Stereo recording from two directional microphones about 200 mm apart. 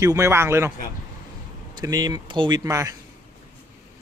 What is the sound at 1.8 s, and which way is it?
Speech, 20° right (ahead or behind).